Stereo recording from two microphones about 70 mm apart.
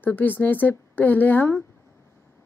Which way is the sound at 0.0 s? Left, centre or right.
Left.